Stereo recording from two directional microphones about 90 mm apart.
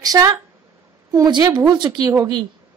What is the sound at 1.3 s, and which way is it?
Speech, 60° right (ahead or behind).